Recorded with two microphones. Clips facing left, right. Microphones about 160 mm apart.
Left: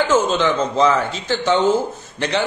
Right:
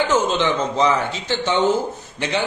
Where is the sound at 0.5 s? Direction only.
20° right (ahead or behind).